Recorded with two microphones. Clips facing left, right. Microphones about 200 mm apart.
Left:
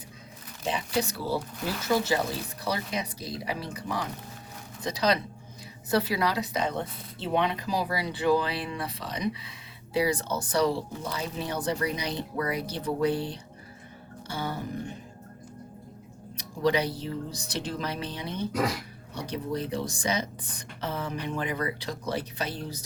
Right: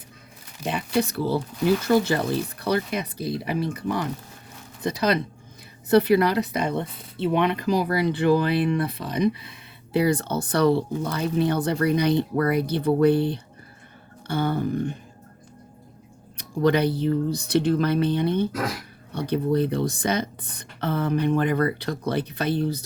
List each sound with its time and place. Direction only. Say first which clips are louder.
0.6 s a woman's voice: right 5 dB; 60° right (ahead or behind)
16.6 s a woman's voice: right 6 dB; 60° right (ahead or behind)